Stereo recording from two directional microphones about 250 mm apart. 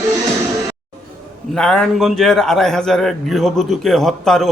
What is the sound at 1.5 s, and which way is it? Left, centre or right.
A man's voice, centre.